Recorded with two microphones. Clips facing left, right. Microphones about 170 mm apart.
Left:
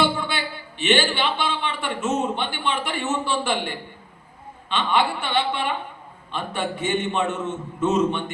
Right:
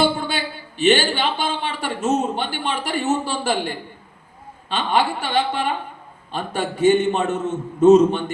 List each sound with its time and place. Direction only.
0.2 s a man's voice: 40° right (ahead or behind)